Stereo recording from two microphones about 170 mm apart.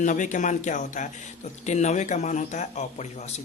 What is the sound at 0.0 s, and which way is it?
Speech, 45° left (ahead or behind).